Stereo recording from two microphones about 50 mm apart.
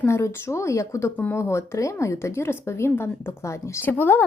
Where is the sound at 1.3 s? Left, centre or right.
Left.